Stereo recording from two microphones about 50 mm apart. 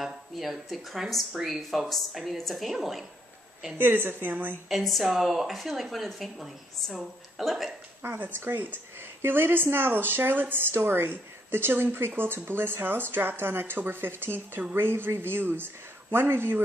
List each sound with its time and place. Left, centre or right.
0.0 s speech: centre
3.8 s speech: right
4.6 s speech: centre
8.0 s speech: right